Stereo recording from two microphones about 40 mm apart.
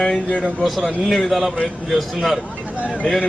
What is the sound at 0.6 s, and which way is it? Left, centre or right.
A man's voice, centre.